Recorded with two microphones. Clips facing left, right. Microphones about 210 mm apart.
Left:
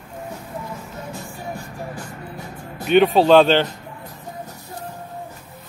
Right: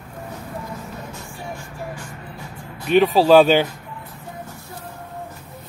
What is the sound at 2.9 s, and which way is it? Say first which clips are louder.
Speech: even; centre (ahead or behind).